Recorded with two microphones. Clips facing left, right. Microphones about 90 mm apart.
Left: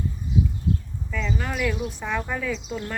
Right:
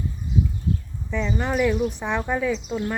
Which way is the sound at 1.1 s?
25° right (ahead or behind).